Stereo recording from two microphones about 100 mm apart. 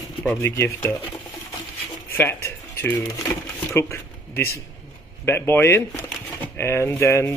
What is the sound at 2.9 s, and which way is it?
Speech, 35° left (ahead or behind).